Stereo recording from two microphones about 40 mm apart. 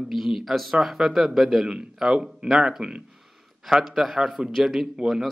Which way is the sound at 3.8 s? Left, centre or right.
Centre.